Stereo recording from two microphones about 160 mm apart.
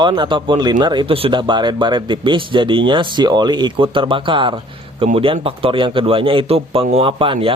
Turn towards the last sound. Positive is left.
turn(degrees=-35)  # may be behind; listen again after turning